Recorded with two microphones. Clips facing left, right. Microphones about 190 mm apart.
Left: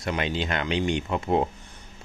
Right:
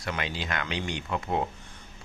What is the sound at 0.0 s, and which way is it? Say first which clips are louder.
Speech: left 6 dB; 20° left (ahead or behind).